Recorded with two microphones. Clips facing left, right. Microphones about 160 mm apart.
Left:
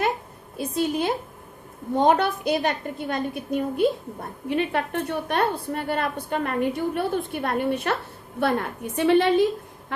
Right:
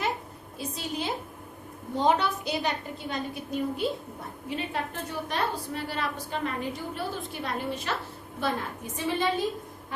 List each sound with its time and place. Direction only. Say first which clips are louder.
0.5 s a woman's voice: left 9 dB; 55° left (ahead or behind)